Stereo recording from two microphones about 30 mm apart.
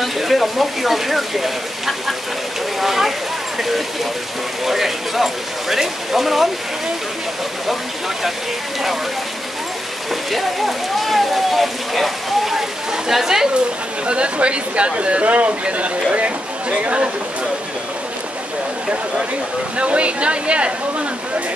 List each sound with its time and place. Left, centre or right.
0.0 s speech: centre
10.3 s speech: centre
14.0 s a woman's voice: right
19.8 s a woman's voice: right